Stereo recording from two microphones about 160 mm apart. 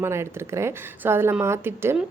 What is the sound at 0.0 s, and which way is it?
Speech, 15° right (ahead or behind).